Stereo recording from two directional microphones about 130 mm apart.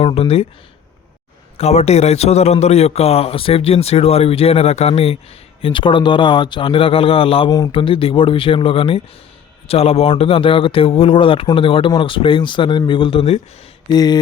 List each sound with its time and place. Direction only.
0.0 s a man's voice: 50° left (ahead or behind)
1.5 s a man's voice: 55° left (ahead or behind)
13.9 s speech: 30° left (ahead or behind)